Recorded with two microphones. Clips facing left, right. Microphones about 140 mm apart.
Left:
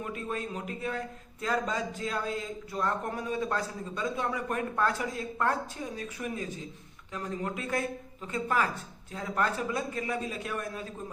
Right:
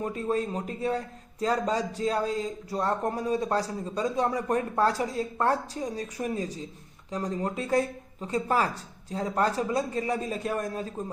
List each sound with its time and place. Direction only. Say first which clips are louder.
0.0 s speech: right 7 dB; 35° right (ahead or behind)